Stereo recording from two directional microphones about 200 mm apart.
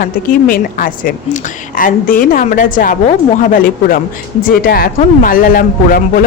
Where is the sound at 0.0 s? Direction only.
45° left (ahead or behind).